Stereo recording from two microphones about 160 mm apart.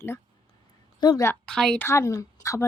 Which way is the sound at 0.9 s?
25° left (ahead or behind).